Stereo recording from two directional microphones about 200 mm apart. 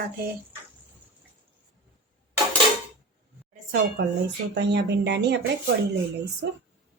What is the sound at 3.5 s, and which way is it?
Dishes, 50° right (ahead or behind).